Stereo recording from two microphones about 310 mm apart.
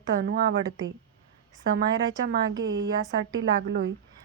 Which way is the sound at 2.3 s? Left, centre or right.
Right.